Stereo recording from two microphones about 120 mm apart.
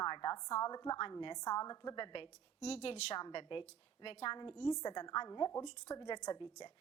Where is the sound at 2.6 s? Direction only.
60° left (ahead or behind).